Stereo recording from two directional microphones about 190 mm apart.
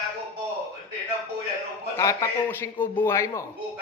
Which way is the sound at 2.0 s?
15° left (ahead or behind).